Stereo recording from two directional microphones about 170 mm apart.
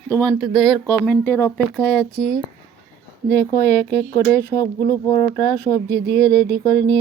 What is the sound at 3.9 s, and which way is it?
Speech, 15° left (ahead or behind).